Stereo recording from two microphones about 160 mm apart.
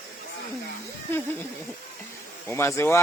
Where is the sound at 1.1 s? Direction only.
15° left (ahead or behind).